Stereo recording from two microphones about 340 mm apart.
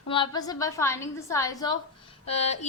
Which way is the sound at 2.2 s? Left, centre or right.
Centre.